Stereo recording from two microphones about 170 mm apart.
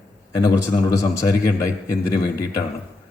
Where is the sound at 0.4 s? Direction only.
20° left (ahead or behind).